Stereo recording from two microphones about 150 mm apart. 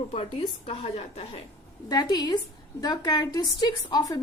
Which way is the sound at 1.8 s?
25° left (ahead or behind).